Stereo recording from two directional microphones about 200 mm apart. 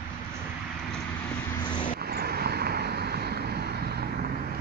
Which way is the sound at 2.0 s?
50° right (ahead or behind).